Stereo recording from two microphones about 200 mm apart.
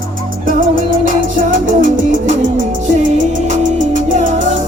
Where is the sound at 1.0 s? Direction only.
40° right (ahead or behind).